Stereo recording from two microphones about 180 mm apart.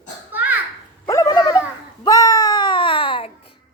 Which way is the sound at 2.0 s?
20° left (ahead or behind).